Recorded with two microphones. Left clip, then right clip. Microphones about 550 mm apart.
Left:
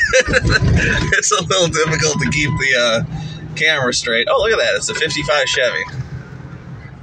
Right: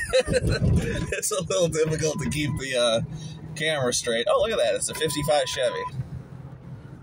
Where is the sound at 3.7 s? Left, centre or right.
Right.